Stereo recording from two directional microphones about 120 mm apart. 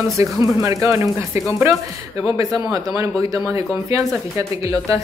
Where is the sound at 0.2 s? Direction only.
25° right (ahead or behind).